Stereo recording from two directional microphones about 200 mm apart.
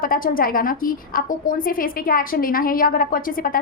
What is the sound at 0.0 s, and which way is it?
A woman's voice, 45° left (ahead or behind).